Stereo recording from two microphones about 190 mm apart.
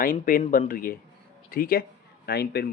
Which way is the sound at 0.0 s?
50° left (ahead or behind).